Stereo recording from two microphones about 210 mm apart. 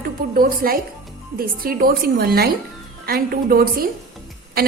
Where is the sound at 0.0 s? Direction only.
45° right (ahead or behind).